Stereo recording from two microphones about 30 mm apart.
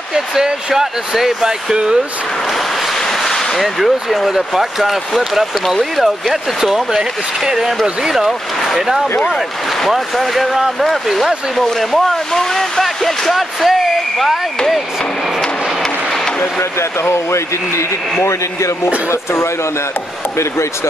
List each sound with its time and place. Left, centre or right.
0.1 s speech: centre
3.1 s a sound: centre
3.6 s speech: centre
6.6 s speech: centre
8.7 s speech: centre
9.9 s speech: centre